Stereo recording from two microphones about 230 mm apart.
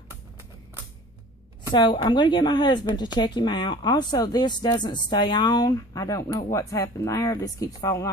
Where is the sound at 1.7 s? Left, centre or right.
Centre.